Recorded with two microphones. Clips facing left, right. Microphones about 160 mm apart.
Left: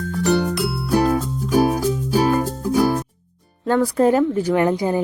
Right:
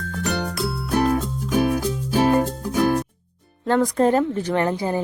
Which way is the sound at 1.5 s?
40° left (ahead or behind).